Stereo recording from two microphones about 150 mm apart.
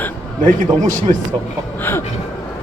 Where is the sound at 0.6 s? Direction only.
55° right (ahead or behind).